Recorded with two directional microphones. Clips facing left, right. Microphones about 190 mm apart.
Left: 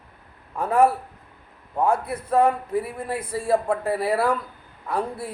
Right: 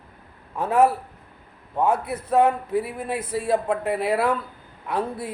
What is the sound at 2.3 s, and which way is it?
Speech, 5° right (ahead or behind).